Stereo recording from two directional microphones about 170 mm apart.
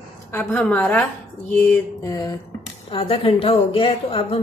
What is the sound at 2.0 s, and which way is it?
Speech, 25° left (ahead or behind).